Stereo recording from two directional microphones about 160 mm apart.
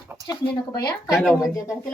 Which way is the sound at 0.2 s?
20° right (ahead or behind).